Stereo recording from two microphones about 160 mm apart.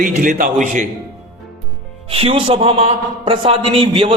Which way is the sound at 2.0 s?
35° right (ahead or behind).